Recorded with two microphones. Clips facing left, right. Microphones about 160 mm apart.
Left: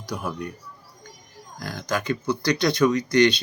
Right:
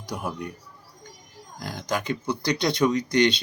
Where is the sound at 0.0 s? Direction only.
20° right (ahead or behind).